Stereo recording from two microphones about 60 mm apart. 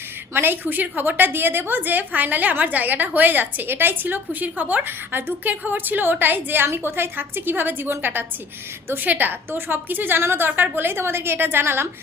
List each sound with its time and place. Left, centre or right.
0.3 s a woman's voice: right